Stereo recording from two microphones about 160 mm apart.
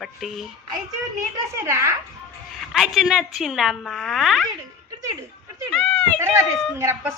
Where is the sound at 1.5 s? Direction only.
20° right (ahead or behind).